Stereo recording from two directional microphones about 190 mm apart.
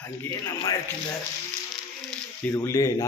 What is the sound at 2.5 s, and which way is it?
Speech, 15° left (ahead or behind).